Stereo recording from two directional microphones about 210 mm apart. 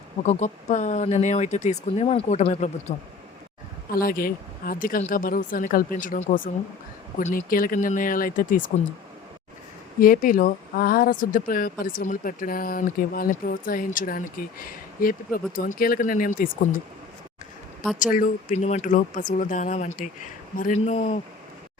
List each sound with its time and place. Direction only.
0.2 s speech: 35° left (ahead or behind)
3.9 s speech: 45° left (ahead or behind)
10.0 s speech: 40° left (ahead or behind)
18.0 s speech: 40° left (ahead or behind)